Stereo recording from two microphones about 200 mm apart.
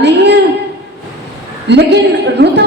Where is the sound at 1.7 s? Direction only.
55° right (ahead or behind).